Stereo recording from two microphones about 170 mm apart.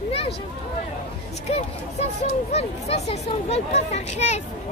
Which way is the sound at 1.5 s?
40° left (ahead or behind).